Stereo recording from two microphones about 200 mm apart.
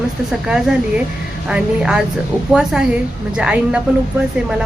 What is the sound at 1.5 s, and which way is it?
A woman's voice, 5° right (ahead or behind).